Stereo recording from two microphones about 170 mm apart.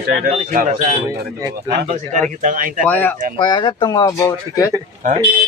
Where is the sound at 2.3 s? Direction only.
50° right (ahead or behind).